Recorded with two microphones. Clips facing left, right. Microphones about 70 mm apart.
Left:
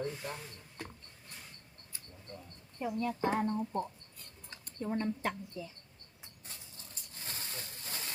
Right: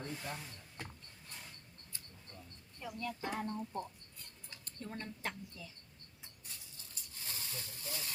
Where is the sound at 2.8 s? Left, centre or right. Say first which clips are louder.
Left 8 dB; left.